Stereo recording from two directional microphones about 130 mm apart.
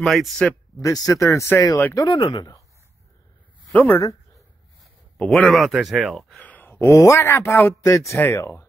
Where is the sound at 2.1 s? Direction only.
35° left (ahead or behind).